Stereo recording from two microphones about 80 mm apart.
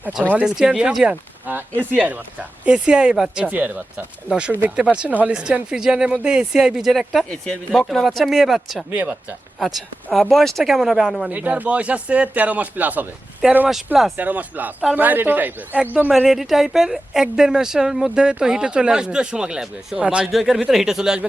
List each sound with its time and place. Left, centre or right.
0.3 s a woman's voice: centre
1.5 s speech: right
2.6 s a woman's voice: centre
3.5 s speech: right
4.3 s a woman's voice: centre
8.9 s speech: centre
9.6 s speech: centre
11.3 s speech: centre
13.7 s speech: centre
14.2 s speech: right
16.1 s a woman's voice: centre